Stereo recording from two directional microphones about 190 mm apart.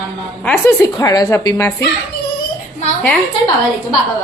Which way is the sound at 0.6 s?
20° left (ahead or behind).